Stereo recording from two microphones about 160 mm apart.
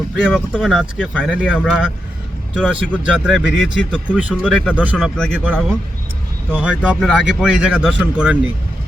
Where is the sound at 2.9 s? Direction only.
5° right (ahead or behind).